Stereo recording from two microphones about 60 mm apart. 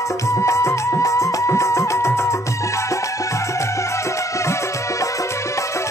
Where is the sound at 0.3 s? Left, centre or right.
Left.